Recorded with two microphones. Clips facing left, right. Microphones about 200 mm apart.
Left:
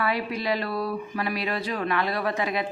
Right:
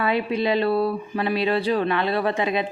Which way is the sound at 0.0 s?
25° right (ahead or behind).